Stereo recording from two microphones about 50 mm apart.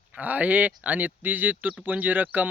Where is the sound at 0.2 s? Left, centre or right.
Right.